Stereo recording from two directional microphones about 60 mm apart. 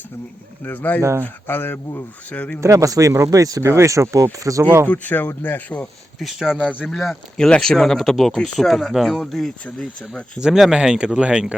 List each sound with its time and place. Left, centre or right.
0.6 s speech: left
2.3 s speech: left
2.6 s speech: right
4.9 s speech: left
6.1 s speech: centre
7.3 s speech: centre
10.4 s speech: centre